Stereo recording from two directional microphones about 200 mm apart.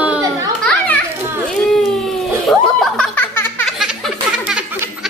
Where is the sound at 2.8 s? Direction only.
5° left (ahead or behind).